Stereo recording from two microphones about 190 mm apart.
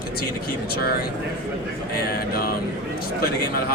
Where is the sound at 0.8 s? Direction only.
55° left (ahead or behind).